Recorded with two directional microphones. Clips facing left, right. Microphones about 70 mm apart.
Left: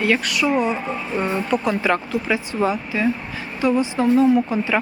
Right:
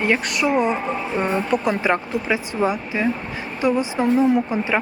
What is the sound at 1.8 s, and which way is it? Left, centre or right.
Speech, right.